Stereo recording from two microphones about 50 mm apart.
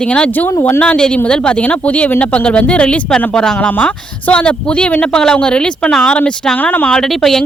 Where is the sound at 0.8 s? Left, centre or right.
Left.